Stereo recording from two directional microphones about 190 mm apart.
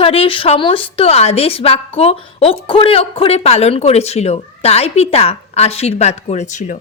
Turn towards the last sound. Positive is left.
turn(degrees=40)  # may be behind; listen again after turning